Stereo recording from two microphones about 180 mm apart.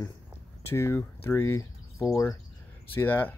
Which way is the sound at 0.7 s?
15° left (ahead or behind).